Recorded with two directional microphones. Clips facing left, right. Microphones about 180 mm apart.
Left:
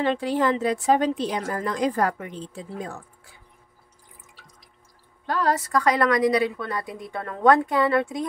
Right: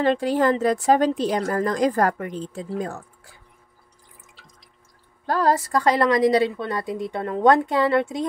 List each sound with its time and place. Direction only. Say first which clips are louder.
0.0 s a woman's voice: right 3 dB; 40° right (ahead or behind)
5.2 s a woman's voice: right 3 dB; 35° right (ahead or behind)